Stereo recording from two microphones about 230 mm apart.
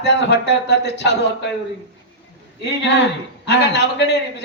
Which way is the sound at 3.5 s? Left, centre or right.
Left.